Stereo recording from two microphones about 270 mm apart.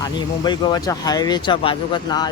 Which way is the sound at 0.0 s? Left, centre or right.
Centre.